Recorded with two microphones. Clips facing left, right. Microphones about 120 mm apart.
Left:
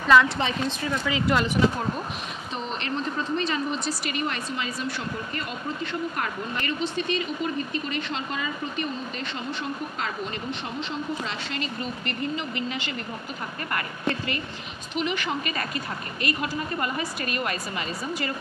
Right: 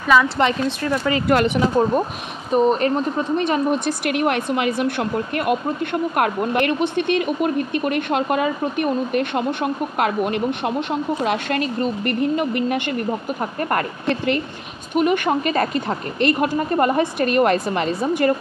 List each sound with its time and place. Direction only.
0.4 s speech: 65° right (ahead or behind)
2.5 s speech: 50° right (ahead or behind)